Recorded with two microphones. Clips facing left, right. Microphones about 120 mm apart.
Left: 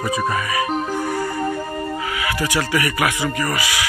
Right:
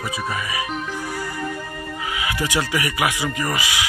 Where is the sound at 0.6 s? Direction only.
40° left (ahead or behind).